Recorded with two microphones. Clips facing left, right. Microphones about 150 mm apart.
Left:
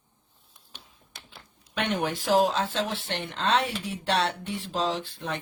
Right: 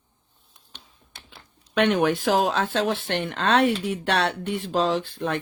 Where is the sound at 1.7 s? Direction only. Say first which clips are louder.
Right 8 dB; 70° right (ahead or behind).